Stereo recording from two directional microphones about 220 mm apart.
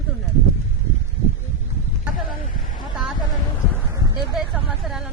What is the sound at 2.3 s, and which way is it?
Speech, 40° left (ahead or behind).